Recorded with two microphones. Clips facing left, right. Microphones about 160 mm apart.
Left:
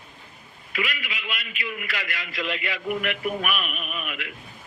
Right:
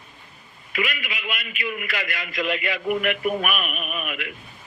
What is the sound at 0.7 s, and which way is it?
A man's voice, 55° right (ahead or behind).